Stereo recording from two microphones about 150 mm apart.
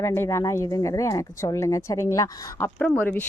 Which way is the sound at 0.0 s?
20° left (ahead or behind).